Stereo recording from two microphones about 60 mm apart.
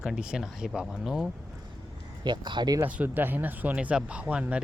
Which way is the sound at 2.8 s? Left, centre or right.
Right.